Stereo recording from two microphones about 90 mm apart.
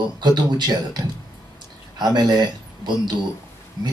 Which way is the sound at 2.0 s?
50° right (ahead or behind).